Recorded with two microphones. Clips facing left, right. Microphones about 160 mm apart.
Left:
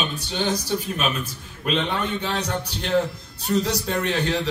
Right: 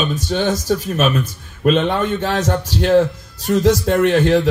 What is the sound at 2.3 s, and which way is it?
Speech, 90° right.